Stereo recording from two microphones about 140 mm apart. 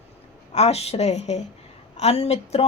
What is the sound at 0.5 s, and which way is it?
A woman's voice, 50° left (ahead or behind).